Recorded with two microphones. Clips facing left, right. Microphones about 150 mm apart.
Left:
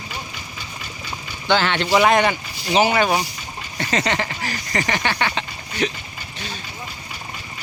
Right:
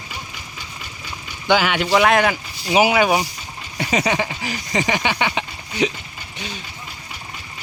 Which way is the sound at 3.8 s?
10° right (ahead or behind).